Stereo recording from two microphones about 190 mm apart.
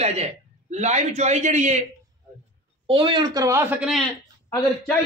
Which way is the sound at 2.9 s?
25° right (ahead or behind).